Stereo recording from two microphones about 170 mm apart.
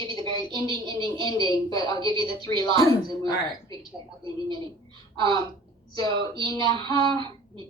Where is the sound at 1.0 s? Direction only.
25° left (ahead or behind).